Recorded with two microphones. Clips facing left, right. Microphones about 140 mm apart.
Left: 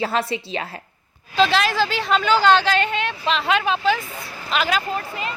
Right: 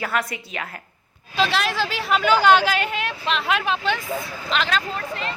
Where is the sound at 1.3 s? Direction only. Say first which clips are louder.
Left 4 dB; centre (ahead or behind).